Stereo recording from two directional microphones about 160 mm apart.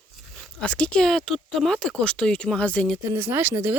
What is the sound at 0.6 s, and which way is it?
Speech, 5° left (ahead or behind).